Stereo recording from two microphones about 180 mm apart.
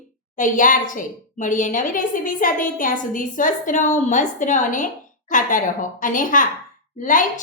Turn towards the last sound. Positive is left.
turn(degrees=45)  # may be behind; listen again after turning